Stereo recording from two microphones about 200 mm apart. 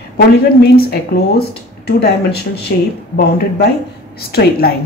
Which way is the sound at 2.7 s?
55° left (ahead or behind).